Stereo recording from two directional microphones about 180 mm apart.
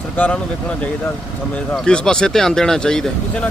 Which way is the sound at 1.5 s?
5° left (ahead or behind).